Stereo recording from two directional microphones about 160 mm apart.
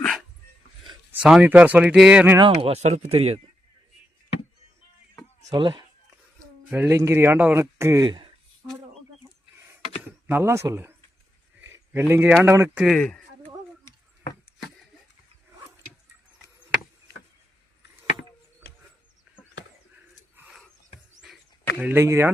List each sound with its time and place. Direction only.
1.2 s speech: 5° right (ahead or behind)
2.4 s speech: 35° right (ahead or behind)
5.5 s speech: 30° right (ahead or behind)
6.7 s speech: 15° right (ahead or behind)
10.2 s speech: 15° right (ahead or behind)
12.8 s speech: 5° left (ahead or behind)
20.3 s a sound: 10° right (ahead or behind)
21.8 s speech: 15° right (ahead or behind)